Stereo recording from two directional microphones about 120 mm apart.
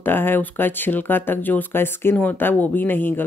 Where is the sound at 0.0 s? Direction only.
15° left (ahead or behind).